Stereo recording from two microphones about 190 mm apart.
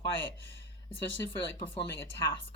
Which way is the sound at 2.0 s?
15° left (ahead or behind).